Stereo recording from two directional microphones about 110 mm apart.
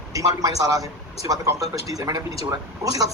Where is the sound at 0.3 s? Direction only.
35° right (ahead or behind).